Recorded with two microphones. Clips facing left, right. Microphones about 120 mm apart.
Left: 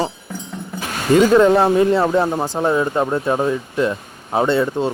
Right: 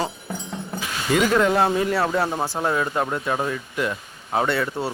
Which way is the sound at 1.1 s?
30° left (ahead or behind).